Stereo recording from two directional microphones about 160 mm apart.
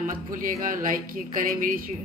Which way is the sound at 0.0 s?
55° right (ahead or behind).